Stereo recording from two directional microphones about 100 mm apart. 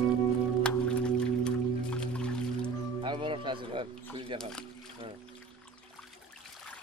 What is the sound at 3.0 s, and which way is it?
Music, 55° right (ahead or behind).